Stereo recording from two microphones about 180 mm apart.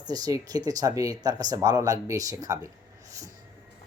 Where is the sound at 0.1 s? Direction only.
20° right (ahead or behind).